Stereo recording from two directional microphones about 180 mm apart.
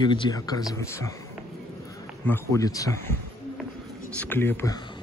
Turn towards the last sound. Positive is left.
turn(degrees=10)  # may be behind; listen again after turning